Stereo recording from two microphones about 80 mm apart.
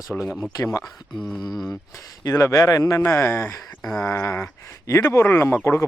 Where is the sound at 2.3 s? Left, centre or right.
Left.